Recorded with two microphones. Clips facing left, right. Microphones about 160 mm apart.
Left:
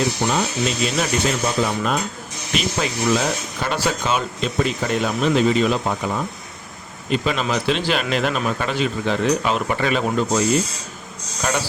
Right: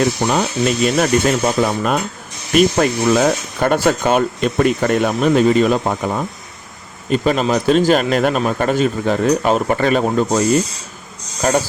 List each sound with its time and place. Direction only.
0.0 s speech: 55° right (ahead or behind)